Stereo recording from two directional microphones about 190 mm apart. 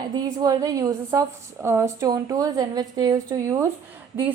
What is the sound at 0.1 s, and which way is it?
Speech, 20° right (ahead or behind).